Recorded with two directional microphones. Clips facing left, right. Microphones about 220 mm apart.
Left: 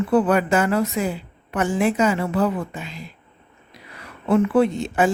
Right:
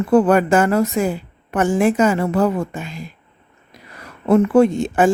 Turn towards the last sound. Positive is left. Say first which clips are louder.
# right 4 dB
turn(degrees=-45)  # may be behind; listen again after turning